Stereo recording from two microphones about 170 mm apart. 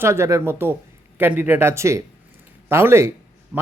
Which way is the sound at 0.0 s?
15° right (ahead or behind).